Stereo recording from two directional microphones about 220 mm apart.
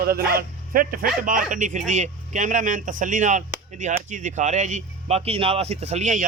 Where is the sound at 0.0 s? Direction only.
45° right (ahead or behind).